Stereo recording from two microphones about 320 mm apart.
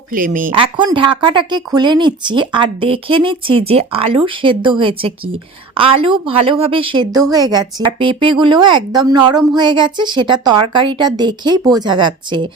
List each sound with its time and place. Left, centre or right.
0.1 s a woman's voice: right